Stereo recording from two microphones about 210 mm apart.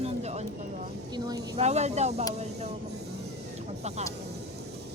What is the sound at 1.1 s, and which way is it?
Speech, 20° right (ahead or behind).